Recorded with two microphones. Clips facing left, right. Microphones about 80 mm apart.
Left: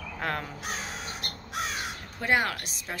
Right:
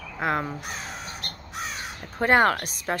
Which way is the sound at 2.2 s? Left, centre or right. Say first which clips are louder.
Right 7 dB; right.